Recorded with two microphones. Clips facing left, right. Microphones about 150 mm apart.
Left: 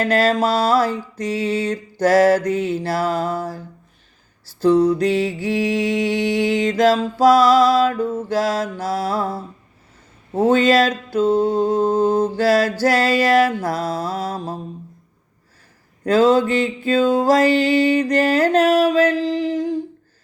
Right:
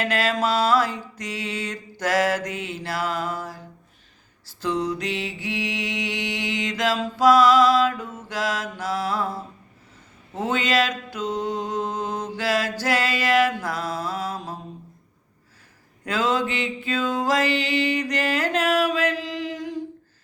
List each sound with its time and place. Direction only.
0.0 s mantra: 35° left (ahead or behind)
4.6 s mantra: 35° left (ahead or behind)
16.0 s mantra: 35° left (ahead or behind)